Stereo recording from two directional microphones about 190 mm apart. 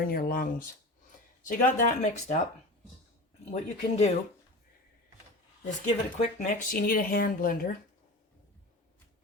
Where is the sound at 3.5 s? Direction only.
35° left (ahead or behind).